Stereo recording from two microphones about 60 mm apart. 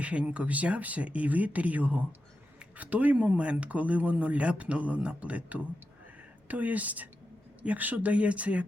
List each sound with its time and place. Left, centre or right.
0.0 s speech: right